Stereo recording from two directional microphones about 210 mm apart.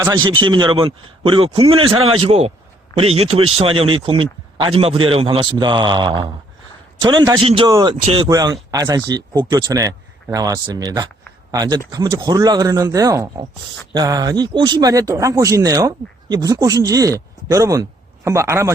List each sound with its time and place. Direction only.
0.4 s speech: 20° right (ahead or behind)